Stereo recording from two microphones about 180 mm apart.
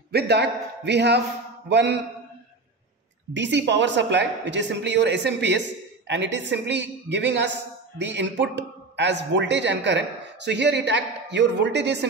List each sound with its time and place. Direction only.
0.1 s speech: 65° right (ahead or behind)
3.3 s speech: 80° right